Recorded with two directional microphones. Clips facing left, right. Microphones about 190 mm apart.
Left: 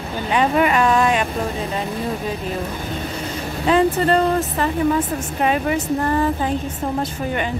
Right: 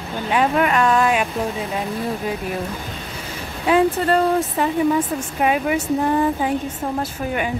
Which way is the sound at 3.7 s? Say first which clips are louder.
Even; 5° right (ahead or behind).